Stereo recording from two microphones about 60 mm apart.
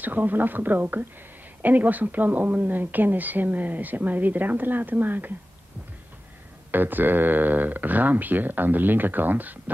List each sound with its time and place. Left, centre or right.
0.0 s a woman's voice: right
6.7 s speech: right